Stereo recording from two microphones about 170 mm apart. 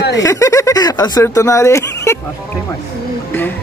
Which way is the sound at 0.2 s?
20° left (ahead or behind).